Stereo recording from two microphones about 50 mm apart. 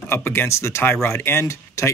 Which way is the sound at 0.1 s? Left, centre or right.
Left.